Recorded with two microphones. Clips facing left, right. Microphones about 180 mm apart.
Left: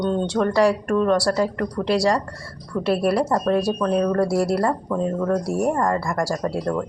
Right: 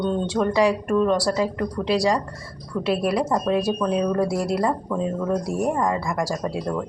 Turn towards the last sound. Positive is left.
turn(degrees=-5)  # may be behind; listen again after turning